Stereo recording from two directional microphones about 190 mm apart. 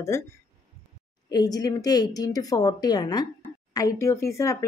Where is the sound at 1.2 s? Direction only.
20° left (ahead or behind).